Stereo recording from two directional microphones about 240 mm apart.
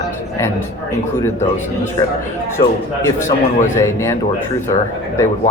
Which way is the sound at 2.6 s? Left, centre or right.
Centre.